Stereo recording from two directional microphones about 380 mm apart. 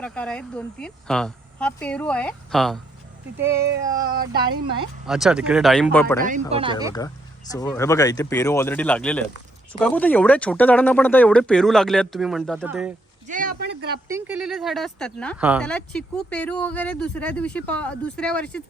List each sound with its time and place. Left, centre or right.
0.0 s speech: centre
4.1 s speech: right
5.0 s speech: centre
6.2 s speech: centre
7.5 s speech: centre
13.2 s a sound: right
14.1 s speech: centre